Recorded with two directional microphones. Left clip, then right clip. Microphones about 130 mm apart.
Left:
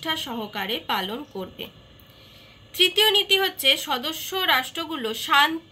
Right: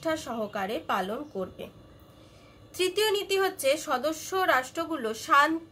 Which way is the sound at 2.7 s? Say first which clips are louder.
Left 8 dB; 25° right (ahead or behind).